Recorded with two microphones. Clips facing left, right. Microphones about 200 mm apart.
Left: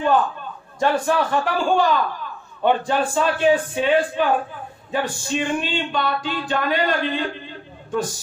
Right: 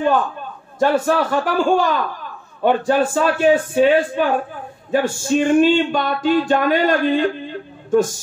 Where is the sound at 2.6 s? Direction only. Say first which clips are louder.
Right 3 dB; 45° right (ahead or behind).